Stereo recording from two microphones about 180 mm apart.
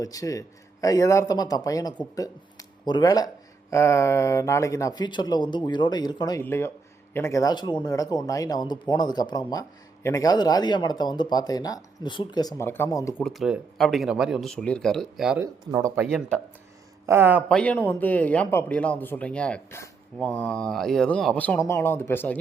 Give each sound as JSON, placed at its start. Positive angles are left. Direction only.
{"t": 0.0, "sound": "speech", "side_deg": 20}
{"t": 13.2, "sound": "speech", "side_deg": 0}
{"t": 15.7, "sound": "speech", "side_deg": -15}
{"t": 17.1, "sound": "speech", "side_deg": -10}
{"t": 17.5, "sound": "speech", "side_deg": 5}